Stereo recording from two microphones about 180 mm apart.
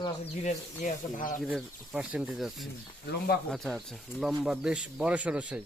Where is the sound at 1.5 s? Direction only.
Centre (ahead or behind).